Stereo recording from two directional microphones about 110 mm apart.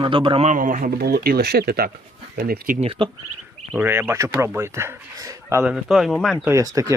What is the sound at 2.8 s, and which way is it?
Speech, 55° right (ahead or behind).